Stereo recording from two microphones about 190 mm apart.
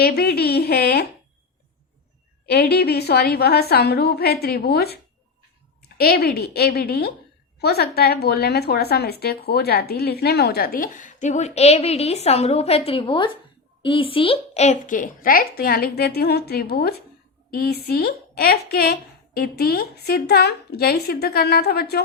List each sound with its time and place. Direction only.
0.0 s speech: 55° left (ahead or behind)
2.5 s a woman's voice: 55° left (ahead or behind)
6.0 s a woman's voice: 55° left (ahead or behind)